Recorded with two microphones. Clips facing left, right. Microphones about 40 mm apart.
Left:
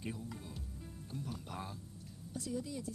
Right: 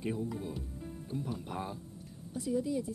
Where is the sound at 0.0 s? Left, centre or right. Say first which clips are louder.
Right 9 dB; right.